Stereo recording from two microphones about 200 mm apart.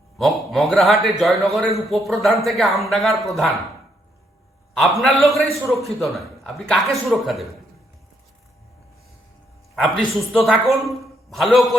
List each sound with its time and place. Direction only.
0.2 s a man's voice: centre (ahead or behind)
4.7 s a man's voice: centre (ahead or behind)
9.7 s a man's voice: 5° left (ahead or behind)